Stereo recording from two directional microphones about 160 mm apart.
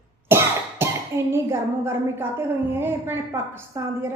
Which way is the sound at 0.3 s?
15° right (ahead or behind).